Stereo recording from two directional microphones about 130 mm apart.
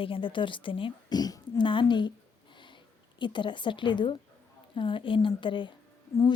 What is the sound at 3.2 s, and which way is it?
Speech, 35° left (ahead or behind).